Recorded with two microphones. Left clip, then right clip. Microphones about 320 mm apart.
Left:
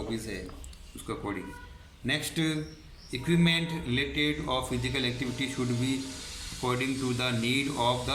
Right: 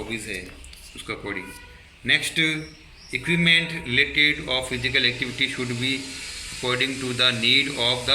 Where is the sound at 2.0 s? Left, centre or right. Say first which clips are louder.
Right 9 dB; left.